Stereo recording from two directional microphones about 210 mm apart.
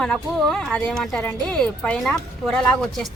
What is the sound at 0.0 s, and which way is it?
Speech, centre (ahead or behind).